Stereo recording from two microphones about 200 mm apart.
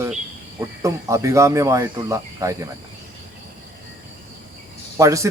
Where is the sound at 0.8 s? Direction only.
15° right (ahead or behind).